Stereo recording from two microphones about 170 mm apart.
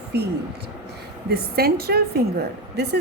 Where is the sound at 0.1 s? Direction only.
75° right (ahead or behind).